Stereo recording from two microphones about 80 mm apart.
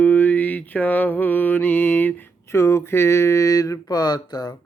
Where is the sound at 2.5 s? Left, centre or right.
Left.